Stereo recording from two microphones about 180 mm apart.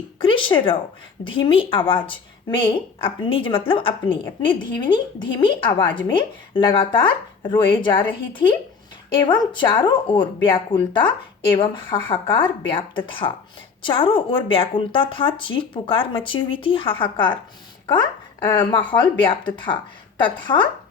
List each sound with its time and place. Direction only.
0.2 s a sound: 30° left (ahead or behind)
1.2 s speech: 30° left (ahead or behind)
18.4 s speech: 25° left (ahead or behind)